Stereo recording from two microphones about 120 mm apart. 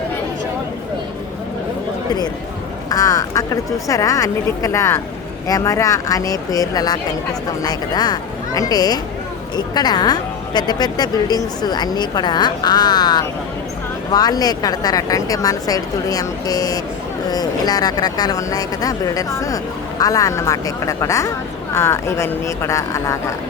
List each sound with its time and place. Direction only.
2.9 s a woman's voice: 30° left (ahead or behind)